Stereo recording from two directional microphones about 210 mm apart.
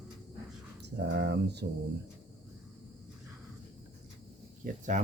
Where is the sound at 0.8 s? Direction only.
55° right (ahead or behind).